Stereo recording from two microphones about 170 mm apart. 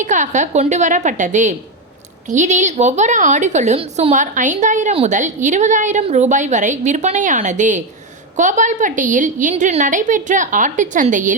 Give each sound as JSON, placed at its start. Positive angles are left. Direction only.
{"t": 0.0, "sound": "a woman's voice", "side_deg": -45}